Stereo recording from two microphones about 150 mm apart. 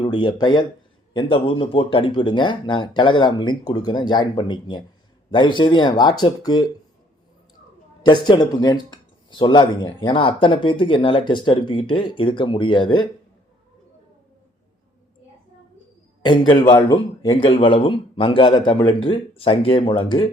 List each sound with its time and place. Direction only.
0.0 s speech: 30° left (ahead or behind)
8.0 s speech: 30° left (ahead or behind)
16.5 s speech: 30° left (ahead or behind)